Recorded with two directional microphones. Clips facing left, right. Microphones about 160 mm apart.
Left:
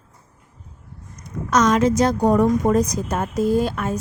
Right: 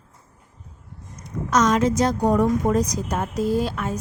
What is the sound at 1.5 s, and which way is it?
A woman's voice, 65° left (ahead or behind).